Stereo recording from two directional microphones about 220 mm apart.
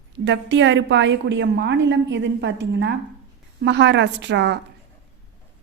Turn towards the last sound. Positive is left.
turn(degrees=-55)  # may be behind; listen again after turning